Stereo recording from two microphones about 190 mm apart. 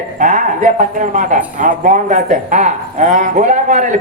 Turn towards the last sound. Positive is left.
turn(degrees=-40)  # may be behind; listen again after turning